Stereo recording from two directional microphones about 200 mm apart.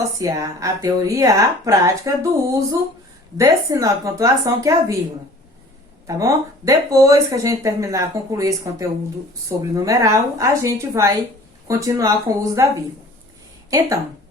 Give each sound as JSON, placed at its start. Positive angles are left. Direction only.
{"t": 0.2, "sound": "speech", "side_deg": -15}
{"t": 6.1, "sound": "speech", "side_deg": -15}